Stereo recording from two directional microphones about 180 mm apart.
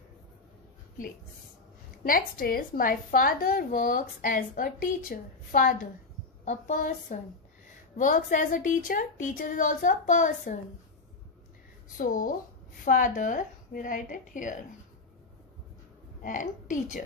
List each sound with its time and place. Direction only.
2.0 s a woman's voice: 55° left (ahead or behind)
12.0 s a woman's voice: 50° left (ahead or behind)
16.2 s a woman's voice: 45° left (ahead or behind)